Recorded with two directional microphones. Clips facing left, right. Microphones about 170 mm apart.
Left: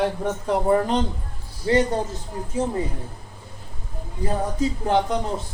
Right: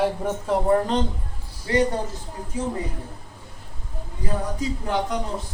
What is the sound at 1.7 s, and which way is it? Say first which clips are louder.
Speech: left 3 dB; 30° left (ahead or behind).